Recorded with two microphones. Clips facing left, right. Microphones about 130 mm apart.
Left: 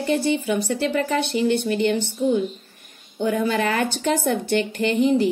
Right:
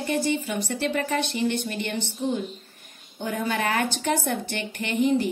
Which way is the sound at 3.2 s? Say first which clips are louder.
Left 6 dB; 35° left (ahead or behind).